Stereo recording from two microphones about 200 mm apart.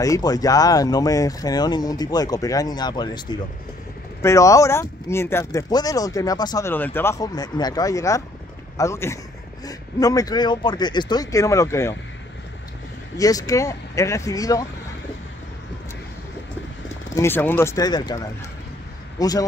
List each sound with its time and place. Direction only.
0.0 s speech: 15° left (ahead or behind)
13.2 s speech: 15° left (ahead or behind)
17.1 s speech: 10° left (ahead or behind)